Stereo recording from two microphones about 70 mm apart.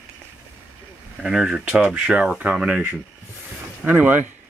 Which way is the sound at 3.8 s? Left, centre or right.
Right.